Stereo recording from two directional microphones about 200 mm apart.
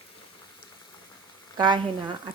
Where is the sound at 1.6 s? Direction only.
20° right (ahead or behind).